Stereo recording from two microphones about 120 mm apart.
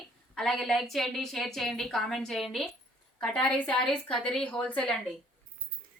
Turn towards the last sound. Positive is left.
turn(degrees=10)  # may be behind; listen again after turning